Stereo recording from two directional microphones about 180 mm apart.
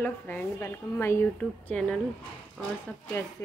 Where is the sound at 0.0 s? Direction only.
10° left (ahead or behind).